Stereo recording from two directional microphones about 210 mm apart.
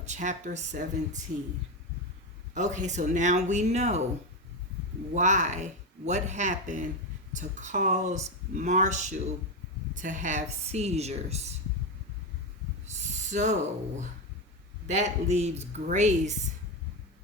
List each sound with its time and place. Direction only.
0.0 s speech: 35° right (ahead or behind)
2.6 s speech: 35° right (ahead or behind)
5.1 s speech: 35° right (ahead or behind)
13.3 s speech: 35° right (ahead or behind)
14.8 s speech: 35° right (ahead or behind)